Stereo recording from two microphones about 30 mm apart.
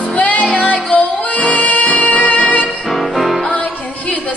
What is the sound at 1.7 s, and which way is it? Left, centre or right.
Music, left.